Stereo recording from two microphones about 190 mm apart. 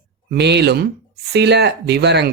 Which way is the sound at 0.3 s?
60° right (ahead or behind).